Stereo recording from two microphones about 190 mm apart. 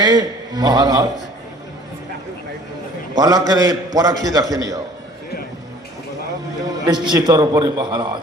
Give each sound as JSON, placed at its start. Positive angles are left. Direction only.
{"t": 0.0, "sound": "a man's voice", "side_deg": -20}
{"t": 3.2, "sound": "a man's voice", "side_deg": -20}
{"t": 6.8, "sound": "a man's voice", "side_deg": -20}